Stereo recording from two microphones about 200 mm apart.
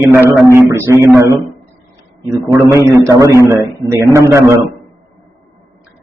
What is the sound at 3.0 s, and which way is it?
A man's voice, 15° right (ahead or behind).